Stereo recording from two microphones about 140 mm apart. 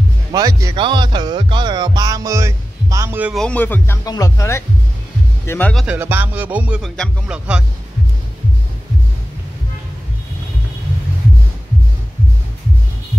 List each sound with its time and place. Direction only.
0.3 s speech: 25° right (ahead or behind)
0.7 s music: 35° right (ahead or behind)
3.3 s speech: 10° left (ahead or behind)
5.9 s music: 15° right (ahead or behind)